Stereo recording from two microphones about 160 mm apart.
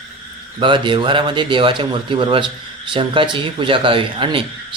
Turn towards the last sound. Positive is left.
turn(degrees=-35)  # may be behind; listen again after turning